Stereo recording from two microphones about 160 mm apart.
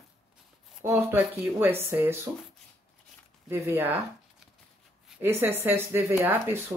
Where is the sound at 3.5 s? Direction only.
15° right (ahead or behind).